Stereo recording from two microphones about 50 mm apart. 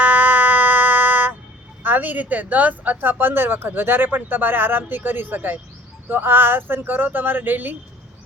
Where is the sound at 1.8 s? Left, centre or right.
Right.